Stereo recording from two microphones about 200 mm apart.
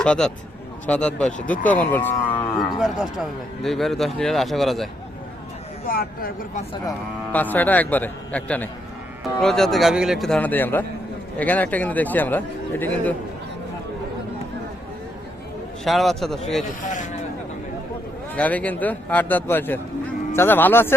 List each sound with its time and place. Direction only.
0.0 s speech: 5° left (ahead or behind)
2.7 s speech: centre (ahead or behind)
5.9 s speech: 50° left (ahead or behind)
7.3 s speech: 10° left (ahead or behind)
15.8 s speech: centre (ahead or behind)
18.3 s speech: 5° left (ahead or behind)